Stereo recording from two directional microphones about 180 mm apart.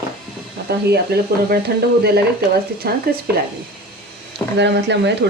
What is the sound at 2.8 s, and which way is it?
Speech, 60° right (ahead or behind).